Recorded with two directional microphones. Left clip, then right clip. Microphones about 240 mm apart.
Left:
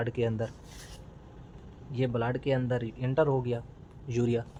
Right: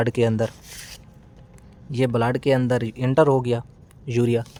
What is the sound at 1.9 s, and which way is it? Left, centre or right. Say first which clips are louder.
Speech: right 9 dB; right.